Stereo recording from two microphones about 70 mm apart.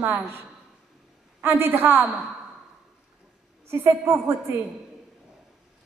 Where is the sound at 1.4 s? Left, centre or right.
Right.